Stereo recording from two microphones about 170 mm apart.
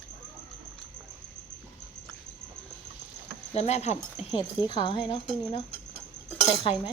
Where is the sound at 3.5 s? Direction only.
40° left (ahead or behind).